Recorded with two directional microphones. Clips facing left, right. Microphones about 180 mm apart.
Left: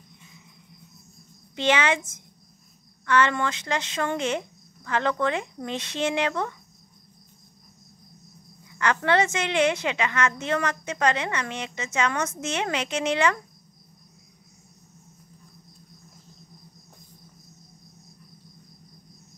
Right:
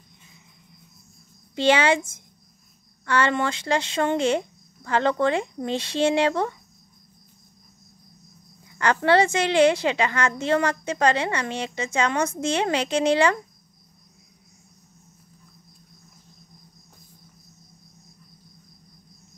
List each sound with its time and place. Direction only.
1.5 s a woman's voice: 30° right (ahead or behind)
8.7 s a woman's voice: 35° right (ahead or behind)